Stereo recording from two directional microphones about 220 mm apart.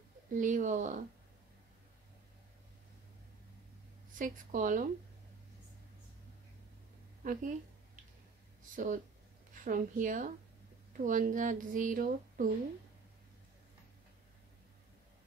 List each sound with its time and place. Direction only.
0.3 s speech: 35° right (ahead or behind)
4.2 s speech: 35° right (ahead or behind)
7.2 s a sound: 35° right (ahead or behind)
8.7 s speech: 35° right (ahead or behind)